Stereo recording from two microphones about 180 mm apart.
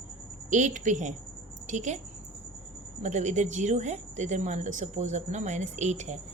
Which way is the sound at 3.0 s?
40° right (ahead or behind).